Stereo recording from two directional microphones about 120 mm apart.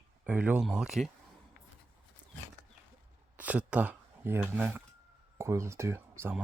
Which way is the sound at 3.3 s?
10° right (ahead or behind).